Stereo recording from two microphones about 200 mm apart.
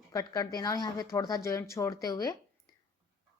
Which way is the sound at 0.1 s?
20° left (ahead or behind).